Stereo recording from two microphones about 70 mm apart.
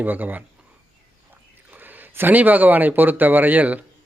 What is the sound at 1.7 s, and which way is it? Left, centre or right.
Speech, right.